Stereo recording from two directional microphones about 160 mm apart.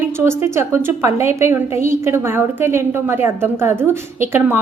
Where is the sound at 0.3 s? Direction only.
15° right (ahead or behind).